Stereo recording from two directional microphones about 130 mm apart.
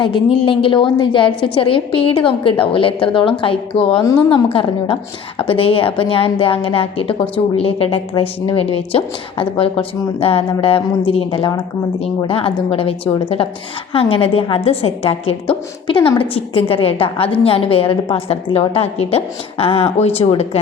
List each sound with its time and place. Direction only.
0.0 s a woman's voice: 40° left (ahead or behind)